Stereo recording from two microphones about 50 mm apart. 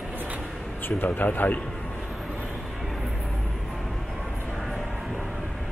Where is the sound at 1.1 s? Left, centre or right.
Left.